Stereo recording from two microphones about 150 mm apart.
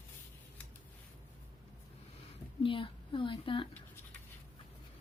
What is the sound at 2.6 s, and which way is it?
A woman's voice, 35° left (ahead or behind).